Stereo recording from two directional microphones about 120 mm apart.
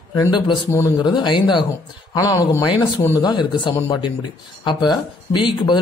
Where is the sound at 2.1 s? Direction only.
30° left (ahead or behind).